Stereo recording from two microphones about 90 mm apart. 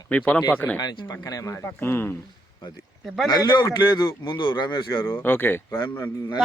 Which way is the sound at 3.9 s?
60° left (ahead or behind).